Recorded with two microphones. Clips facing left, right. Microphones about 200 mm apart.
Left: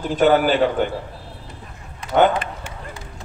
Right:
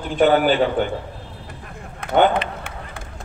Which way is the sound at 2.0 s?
55° right (ahead or behind).